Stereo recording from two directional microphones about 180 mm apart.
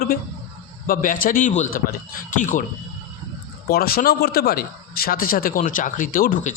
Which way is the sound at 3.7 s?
55° left (ahead or behind).